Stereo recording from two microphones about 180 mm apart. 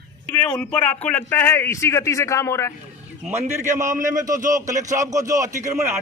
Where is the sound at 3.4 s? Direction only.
40° right (ahead or behind).